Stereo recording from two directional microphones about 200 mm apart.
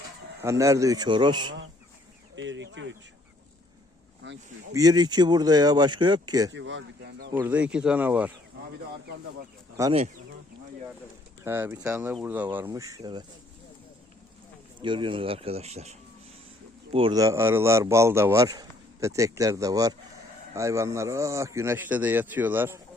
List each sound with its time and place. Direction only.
0.4 s speech: 15° right (ahead or behind)
2.3 s speech: 65° right (ahead or behind)
4.7 s speech: 20° right (ahead or behind)
6.5 s speech: 65° right (ahead or behind)
7.3 s a man's voice: 10° right (ahead or behind)
9.8 s a man's voice: 15° right (ahead or behind)
11.4 s a man's voice: 10° right (ahead or behind)
14.8 s a man's voice: 25° right (ahead or behind)